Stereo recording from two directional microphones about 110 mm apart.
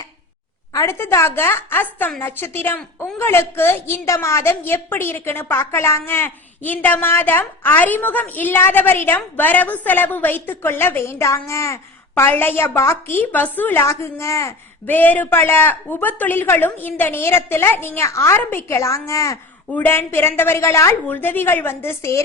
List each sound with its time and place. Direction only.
0.7 s a woman's voice: 25° left (ahead or behind)
14.8 s a woman's voice: 15° left (ahead or behind)
19.7 s a woman's voice: 20° left (ahead or behind)